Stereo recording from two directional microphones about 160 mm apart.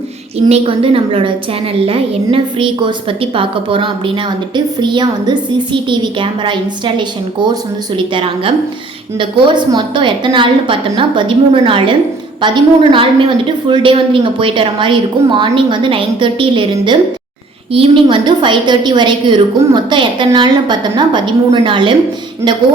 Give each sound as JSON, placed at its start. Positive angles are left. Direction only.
{"t": 0.4, "sound": "a woman's voice", "side_deg": -40}